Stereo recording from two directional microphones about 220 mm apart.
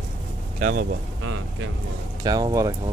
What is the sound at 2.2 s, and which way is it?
Speech, 20° right (ahead or behind).